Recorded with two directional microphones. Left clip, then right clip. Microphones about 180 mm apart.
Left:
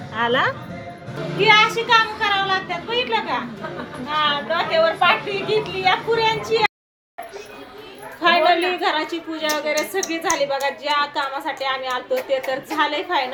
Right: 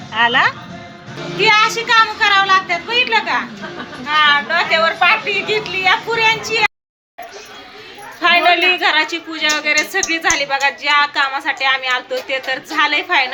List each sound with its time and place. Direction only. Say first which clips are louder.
0.1 s speech: right 6 dB; 10° left (ahead or behind)
1.4 s speech: right 2 dB; 10° right (ahead or behind)
8.2 s a sound: right 4 dB; centre (ahead or behind)
8.7 s a woman's voice: right 7 dB; centre (ahead or behind)